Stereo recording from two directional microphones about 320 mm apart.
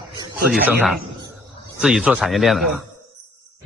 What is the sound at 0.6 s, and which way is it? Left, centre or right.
A man's voice, centre.